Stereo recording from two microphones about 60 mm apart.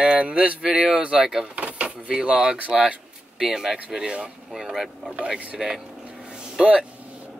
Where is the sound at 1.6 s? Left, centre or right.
Right; by 5.1 s centre.